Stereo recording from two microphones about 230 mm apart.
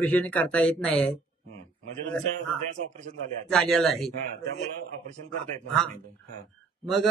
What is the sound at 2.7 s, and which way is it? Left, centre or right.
Speech, right.